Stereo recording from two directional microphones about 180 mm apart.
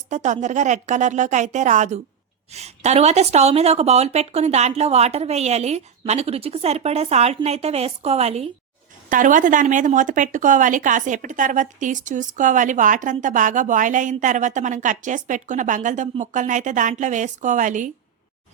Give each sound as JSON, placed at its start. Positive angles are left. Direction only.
{"t": 0.1, "sound": "a woman's voice", "side_deg": -40}
{"t": 9.0, "sound": "speech", "side_deg": -45}